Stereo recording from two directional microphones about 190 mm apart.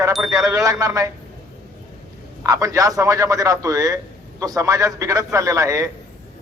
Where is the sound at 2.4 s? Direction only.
15° right (ahead or behind).